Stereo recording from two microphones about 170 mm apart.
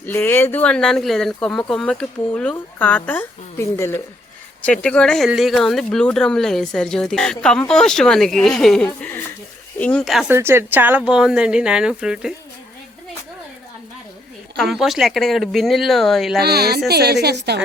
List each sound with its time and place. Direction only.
0.0 s speech: 10° left (ahead or behind)
4.6 s speech: 5° left (ahead or behind)
10.2 s speech: 15° right (ahead or behind)
14.5 s speech: centre (ahead or behind)
16.4 s a woman's voice: 70° right (ahead or behind)